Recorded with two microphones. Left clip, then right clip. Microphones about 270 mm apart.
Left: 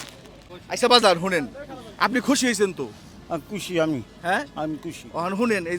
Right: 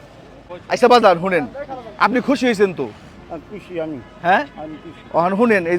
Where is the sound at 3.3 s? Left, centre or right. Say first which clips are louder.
Left 2 dB; left.